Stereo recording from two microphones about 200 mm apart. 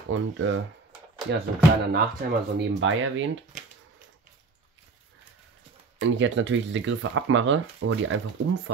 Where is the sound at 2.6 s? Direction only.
70° right (ahead or behind).